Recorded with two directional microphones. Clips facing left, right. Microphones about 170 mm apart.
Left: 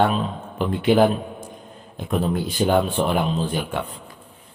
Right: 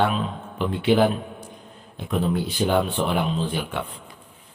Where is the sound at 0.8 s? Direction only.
45° left (ahead or behind).